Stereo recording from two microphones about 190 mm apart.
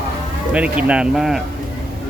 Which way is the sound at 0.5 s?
5° right (ahead or behind).